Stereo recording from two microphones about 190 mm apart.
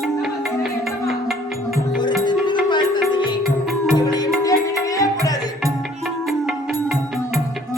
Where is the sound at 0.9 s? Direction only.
Centre (ahead or behind).